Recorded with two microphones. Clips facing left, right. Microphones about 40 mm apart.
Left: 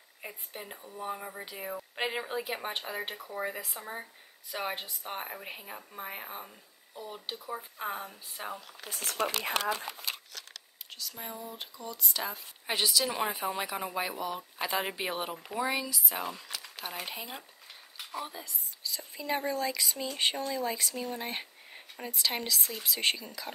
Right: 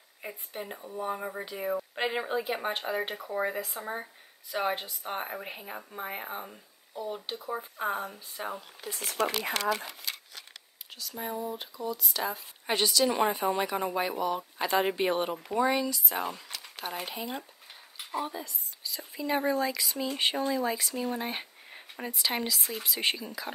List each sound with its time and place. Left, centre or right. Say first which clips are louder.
0.2 s speech: right 4 dB; centre
1.4 s speech: right 7 dB; centre
3.2 s speech: right 5 dB; right
3.8 s speech: right 4 dB; centre
7.4 s speech: right 5 dB; right
9.4 s speech: right 2 dB; right
11.0 s speech: right 7 dB; centre